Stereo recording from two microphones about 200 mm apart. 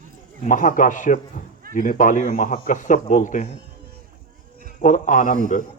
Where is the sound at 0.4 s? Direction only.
40° left (ahead or behind).